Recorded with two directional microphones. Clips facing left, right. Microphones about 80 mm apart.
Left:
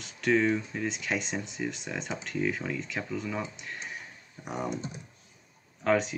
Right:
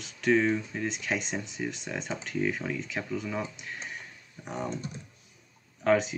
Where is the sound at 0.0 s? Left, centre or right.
Centre.